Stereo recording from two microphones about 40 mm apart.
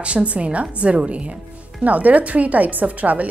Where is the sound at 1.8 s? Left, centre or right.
Right.